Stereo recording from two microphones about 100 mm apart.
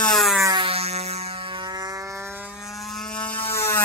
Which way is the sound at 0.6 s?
75° right (ahead or behind).